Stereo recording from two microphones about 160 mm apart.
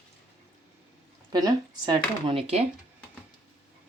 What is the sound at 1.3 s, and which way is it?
Speech, 25° right (ahead or behind).